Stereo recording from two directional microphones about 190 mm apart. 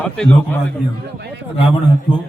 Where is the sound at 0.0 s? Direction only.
10° left (ahead or behind).